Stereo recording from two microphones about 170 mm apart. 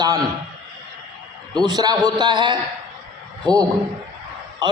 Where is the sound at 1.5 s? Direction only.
25° right (ahead or behind).